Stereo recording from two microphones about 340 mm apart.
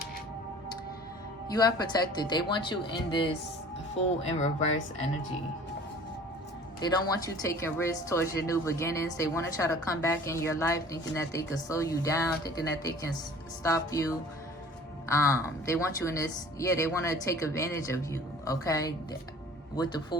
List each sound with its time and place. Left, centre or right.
1.5 s a woman's voice: centre
6.7 s a woman's voice: centre